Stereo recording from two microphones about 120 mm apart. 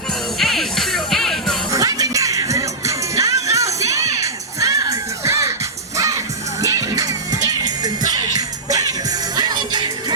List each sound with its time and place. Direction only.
0.3 s music: centre (ahead or behind)
1.7 s music: 30° right (ahead or behind)
6.6 s music: 30° right (ahead or behind)